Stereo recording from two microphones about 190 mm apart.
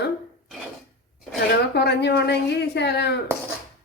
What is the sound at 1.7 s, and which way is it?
Speech, 60° left (ahead or behind).